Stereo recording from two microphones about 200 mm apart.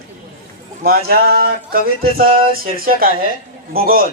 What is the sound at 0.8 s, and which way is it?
Speech, 50° right (ahead or behind).